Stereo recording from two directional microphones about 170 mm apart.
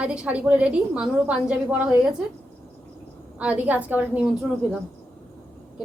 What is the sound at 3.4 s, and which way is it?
A woman's voice, 10° right (ahead or behind).